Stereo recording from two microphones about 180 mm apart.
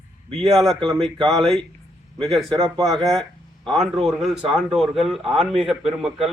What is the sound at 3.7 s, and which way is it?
Speech, centre (ahead or behind).